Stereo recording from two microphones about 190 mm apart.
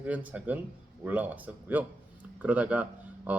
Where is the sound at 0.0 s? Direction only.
10° right (ahead or behind).